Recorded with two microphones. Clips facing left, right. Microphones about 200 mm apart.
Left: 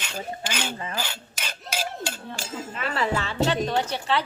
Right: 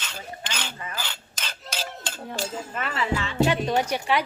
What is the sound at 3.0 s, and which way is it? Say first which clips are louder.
Music: left 1 dB; 40° left (ahead or behind).